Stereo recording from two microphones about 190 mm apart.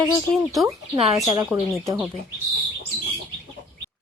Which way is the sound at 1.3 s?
15° right (ahead or behind).